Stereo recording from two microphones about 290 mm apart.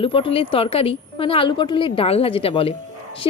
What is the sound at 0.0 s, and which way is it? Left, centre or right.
A woman's voice, centre.